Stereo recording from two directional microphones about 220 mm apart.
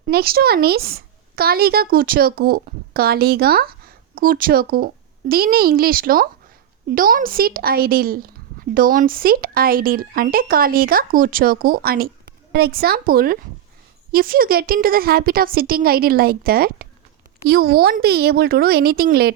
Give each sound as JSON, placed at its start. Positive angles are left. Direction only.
{"t": 0.1, "sound": "a woman's voice", "side_deg": -45}